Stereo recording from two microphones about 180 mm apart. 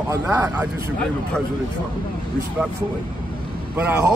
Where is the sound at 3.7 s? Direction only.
10° right (ahead or behind).